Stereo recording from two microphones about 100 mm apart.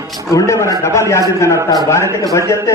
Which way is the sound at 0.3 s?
30° left (ahead or behind).